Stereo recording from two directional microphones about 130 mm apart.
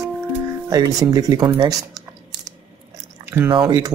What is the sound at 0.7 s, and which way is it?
Speech, 25° right (ahead or behind).